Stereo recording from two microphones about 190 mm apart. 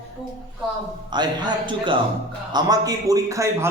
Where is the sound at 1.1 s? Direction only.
20° right (ahead or behind).